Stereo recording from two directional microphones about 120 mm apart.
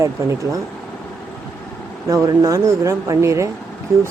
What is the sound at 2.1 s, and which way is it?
Speech, 30° right (ahead or behind).